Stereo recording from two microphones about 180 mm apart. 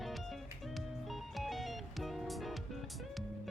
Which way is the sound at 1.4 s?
Centre (ahead or behind).